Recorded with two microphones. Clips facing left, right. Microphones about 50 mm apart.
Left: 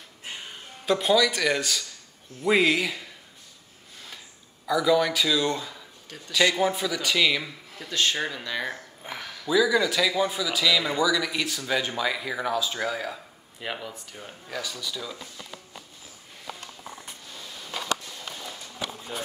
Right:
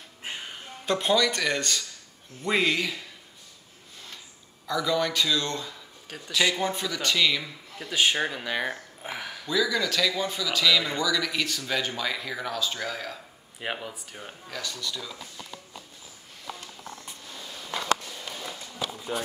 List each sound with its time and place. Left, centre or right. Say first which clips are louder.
0.8 s a man's voice: left 2 dB; centre
4.6 s speech: left 4 dB; centre
6.0 s speech: right 3 dB; centre
6.5 s a man's voice: left 4 dB; centre
7.9 s speech: right 2 dB; centre
9.5 s speech: left 4 dB; centre
13.6 s speech: right 1 dB; centre
14.5 s speech: left 2 dB; centre